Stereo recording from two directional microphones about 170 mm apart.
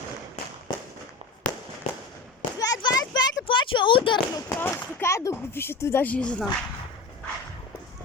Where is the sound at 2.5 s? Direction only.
20° left (ahead or behind).